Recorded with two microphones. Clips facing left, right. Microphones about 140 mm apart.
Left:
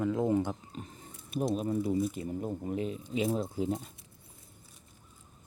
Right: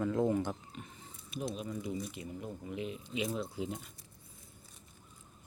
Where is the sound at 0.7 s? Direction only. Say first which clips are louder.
Left 5 dB; 35° left (ahead or behind).